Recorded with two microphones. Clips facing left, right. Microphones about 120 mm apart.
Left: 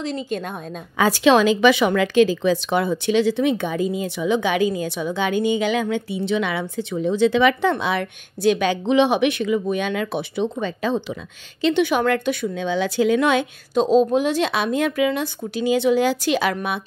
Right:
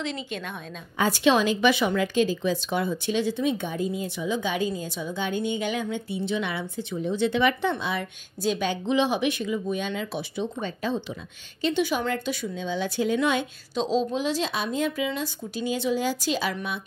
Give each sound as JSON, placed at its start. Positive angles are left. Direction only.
{"t": 0.0, "sound": "a woman's voice", "side_deg": 40}
{"t": 0.9, "sound": "a woman's voice", "side_deg": 90}
{"t": 11.6, "sound": "speech", "side_deg": 65}
{"t": 13.7, "sound": "a woman's voice", "side_deg": 50}